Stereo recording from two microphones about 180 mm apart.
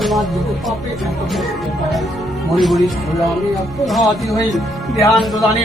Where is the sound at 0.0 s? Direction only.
Centre (ahead or behind).